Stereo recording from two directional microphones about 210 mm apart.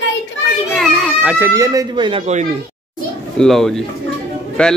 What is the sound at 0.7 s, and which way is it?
Speech, centre (ahead or behind).